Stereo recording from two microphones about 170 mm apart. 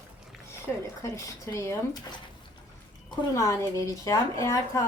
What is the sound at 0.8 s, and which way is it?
A woman's voice, 20° left (ahead or behind).